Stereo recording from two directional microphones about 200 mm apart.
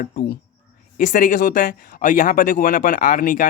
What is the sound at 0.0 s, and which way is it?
Speech, 50° left (ahead or behind).